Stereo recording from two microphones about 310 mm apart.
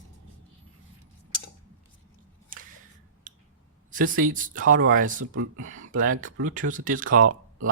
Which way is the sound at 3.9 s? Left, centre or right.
Right.